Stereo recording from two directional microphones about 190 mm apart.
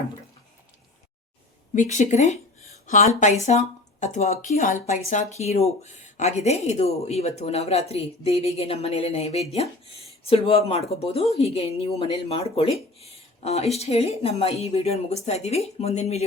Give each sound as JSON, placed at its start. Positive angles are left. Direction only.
{"t": 1.7, "sound": "speech", "side_deg": 40}